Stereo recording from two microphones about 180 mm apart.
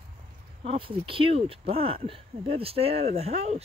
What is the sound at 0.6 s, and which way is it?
Speech, 30° right (ahead or behind).